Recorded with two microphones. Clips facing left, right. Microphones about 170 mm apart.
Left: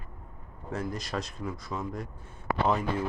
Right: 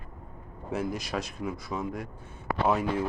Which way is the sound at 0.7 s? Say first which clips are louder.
Right 2 dB; 5° right (ahead or behind).